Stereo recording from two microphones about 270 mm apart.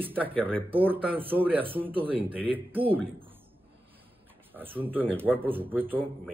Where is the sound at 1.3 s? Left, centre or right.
Centre.